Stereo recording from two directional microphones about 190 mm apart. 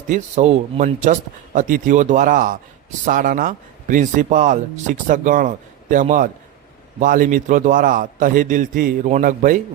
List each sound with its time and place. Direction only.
0.1 s speech: 35° right (ahead or behind)